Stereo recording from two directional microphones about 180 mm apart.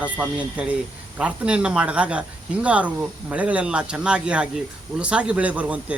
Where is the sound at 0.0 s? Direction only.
5° right (ahead or behind).